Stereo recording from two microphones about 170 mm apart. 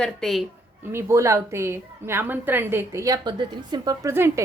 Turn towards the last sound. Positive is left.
turn(degrees=-15)  # may be behind; listen again after turning